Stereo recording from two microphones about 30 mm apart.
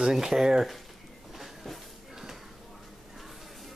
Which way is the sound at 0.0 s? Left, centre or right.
Centre.